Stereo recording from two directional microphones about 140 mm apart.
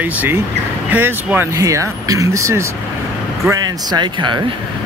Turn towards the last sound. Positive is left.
turn(degrees=-35)  # may be behind; listen again after turning